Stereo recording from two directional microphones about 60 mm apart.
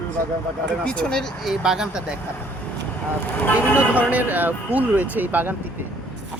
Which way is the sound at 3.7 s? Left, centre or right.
Right.